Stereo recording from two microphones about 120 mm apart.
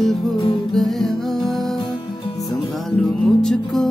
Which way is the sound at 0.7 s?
Centre (ahead or behind).